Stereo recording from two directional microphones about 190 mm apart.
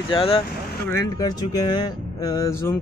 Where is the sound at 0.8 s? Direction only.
15° left (ahead or behind).